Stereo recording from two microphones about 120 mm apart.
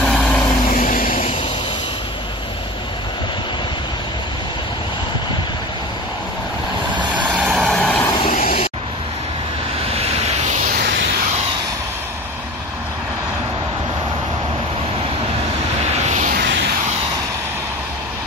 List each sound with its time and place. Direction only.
0.0 s vehicle: 5° left (ahead or behind)
0.7 s vehicle: 90° left
7.2 s vehicle: 10° right (ahead or behind)
7.7 s vehicle: 5° left (ahead or behind)
8.3 s vehicle: 90° left
9.9 s vehicle: 60° right (ahead or behind)
15.9 s vehicle: 70° right (ahead or behind)